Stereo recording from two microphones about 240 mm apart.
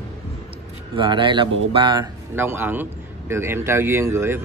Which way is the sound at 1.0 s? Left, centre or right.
Centre.